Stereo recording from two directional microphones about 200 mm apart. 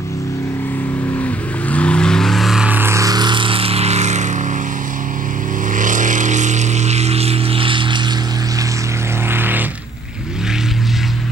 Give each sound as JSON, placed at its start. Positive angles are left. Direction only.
{"t": 1.7, "sound": "vehicle", "side_deg": 5}
{"t": 5.8, "sound": "vehicle", "side_deg": -40}
{"t": 9.3, "sound": "vehicle", "side_deg": -10}